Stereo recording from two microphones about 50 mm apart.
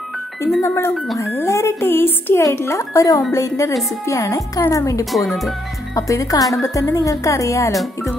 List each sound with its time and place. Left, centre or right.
0.6 s speech: left
1.8 s a sound: left
2.3 s speech: left
3.3 s a woman's voice: left
5.1 s speech: centre
5.9 s a woman's voice: left